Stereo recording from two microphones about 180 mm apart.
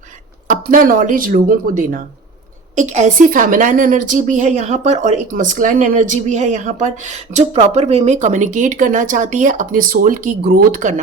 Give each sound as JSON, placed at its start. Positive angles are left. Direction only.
{"t": 0.4, "sound": "a woman's voice", "side_deg": -50}